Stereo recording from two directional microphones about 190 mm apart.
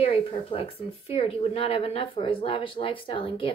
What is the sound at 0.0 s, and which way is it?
Speech, 30° left (ahead or behind).